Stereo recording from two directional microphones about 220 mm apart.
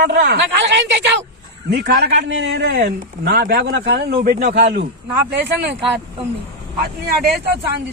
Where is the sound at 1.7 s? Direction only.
50° right (ahead or behind).